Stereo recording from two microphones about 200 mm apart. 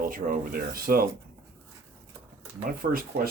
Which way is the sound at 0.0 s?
45° right (ahead or behind).